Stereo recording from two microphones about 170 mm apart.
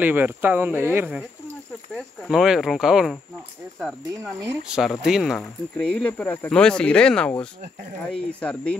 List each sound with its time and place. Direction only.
0.0 s speech: 10° right (ahead or behind)
2.0 s speech: centre (ahead or behind)
4.2 s speech: 15° right (ahead or behind)
4.6 s speech: 5° right (ahead or behind)